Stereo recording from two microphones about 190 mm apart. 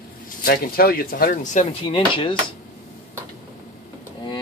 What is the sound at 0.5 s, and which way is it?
Speech, 50° left (ahead or behind).